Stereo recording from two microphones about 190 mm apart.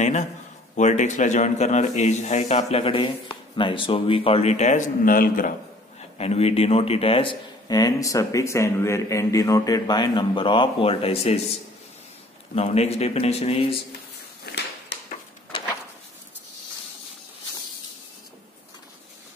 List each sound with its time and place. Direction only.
0.0 s a man's voice: 40° left (ahead or behind)
5.9 s speech: 35° left (ahead or behind)
12.5 s a man's voice: 35° left (ahead or behind)
14.4 s a sound: 60° left (ahead or behind)